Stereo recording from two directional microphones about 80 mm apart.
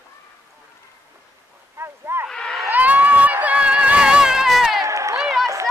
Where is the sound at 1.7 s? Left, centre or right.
Right.